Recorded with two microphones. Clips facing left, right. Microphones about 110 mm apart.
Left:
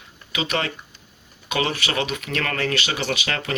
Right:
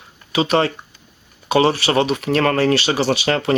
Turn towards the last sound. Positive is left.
turn(degrees=-30)  # may be behind; listen again after turning